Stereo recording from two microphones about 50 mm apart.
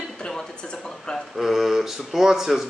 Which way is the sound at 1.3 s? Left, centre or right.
Centre.